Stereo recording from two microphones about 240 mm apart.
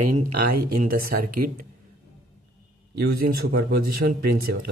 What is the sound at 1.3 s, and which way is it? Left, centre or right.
Speech, right.